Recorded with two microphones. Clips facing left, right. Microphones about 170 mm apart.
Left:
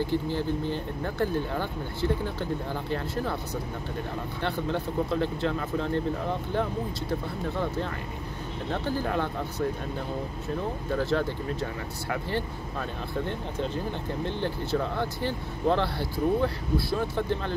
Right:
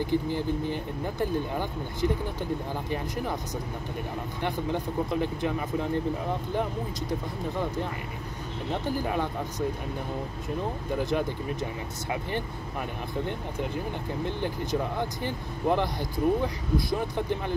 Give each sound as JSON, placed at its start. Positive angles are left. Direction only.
{"t": 0.0, "sound": "speech", "side_deg": -15}
{"t": 4.4, "sound": "speech", "side_deg": -15}
{"t": 10.9, "sound": "speech", "side_deg": -15}
{"t": 14.2, "sound": "speech", "side_deg": -15}